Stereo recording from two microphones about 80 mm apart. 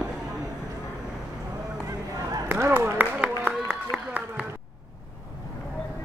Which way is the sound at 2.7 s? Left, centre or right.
Right.